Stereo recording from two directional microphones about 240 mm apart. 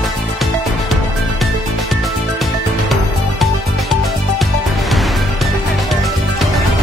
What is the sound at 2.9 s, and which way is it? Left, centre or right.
Music, centre.